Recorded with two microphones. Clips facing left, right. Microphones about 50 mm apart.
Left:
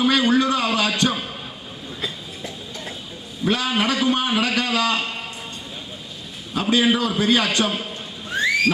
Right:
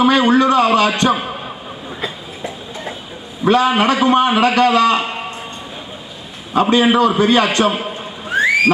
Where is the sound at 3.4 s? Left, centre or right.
Right.